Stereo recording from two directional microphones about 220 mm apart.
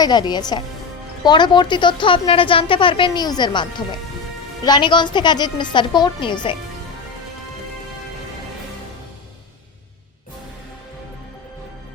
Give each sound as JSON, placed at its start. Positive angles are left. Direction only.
{"t": 0.0, "sound": "a woman's voice", "side_deg": 20}